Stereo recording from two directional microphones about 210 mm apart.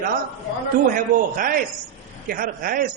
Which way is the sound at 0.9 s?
40° right (ahead or behind).